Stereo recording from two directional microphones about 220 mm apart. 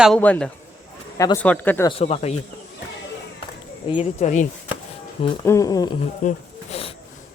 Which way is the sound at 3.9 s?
30° left (ahead or behind).